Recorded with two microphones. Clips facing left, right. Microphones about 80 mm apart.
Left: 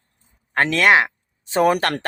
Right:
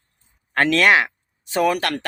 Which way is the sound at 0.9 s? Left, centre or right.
Left.